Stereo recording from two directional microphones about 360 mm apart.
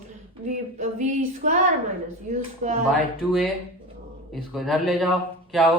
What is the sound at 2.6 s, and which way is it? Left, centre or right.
Speech, right.